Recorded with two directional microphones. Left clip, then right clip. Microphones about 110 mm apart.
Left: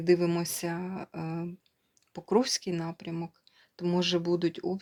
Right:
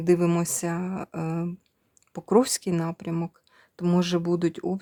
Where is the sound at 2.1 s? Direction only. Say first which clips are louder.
Right 5 dB; 75° right (ahead or behind).